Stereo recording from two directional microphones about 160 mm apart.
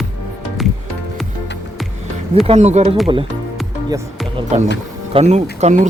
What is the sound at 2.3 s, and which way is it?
Speech, 40° right (ahead or behind).